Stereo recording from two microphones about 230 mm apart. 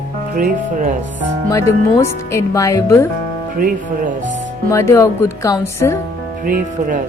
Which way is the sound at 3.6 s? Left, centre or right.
Right.